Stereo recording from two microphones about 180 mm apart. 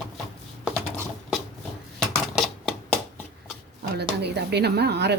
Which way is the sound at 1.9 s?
Centre (ahead or behind).